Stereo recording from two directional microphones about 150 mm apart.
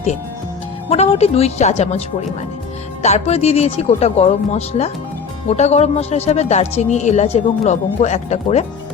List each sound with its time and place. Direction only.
0.9 s speech: 45° left (ahead or behind)